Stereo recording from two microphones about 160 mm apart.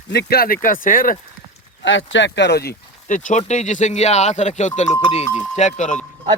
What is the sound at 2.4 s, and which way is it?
Speech, 90° left.